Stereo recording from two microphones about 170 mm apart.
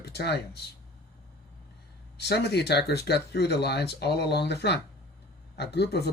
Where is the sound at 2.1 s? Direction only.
75° left (ahead or behind).